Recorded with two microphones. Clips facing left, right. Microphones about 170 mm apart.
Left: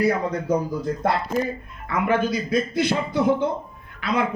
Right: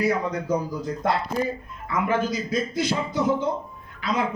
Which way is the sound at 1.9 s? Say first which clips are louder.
Left 2 dB; 60° left (ahead or behind).